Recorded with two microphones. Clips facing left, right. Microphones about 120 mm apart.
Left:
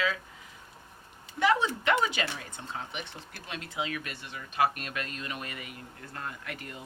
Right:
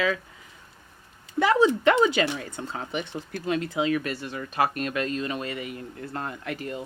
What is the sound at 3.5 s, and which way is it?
Speech, 35° right (ahead or behind).